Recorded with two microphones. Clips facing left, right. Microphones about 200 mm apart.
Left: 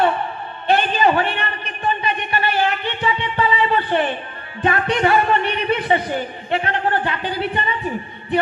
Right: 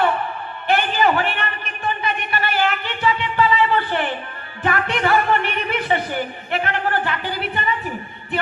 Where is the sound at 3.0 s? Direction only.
25° left (ahead or behind).